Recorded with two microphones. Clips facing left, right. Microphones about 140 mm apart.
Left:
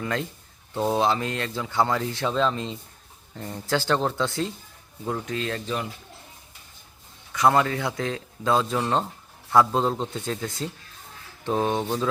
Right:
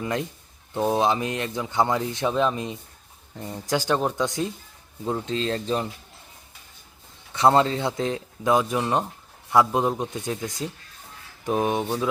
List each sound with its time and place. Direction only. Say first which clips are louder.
0.0 s speech: right 1 dB; 20° right (ahead or behind)
7.3 s speech: right 2 dB; 25° right (ahead or behind); by 12.0 s 10° right (ahead or behind)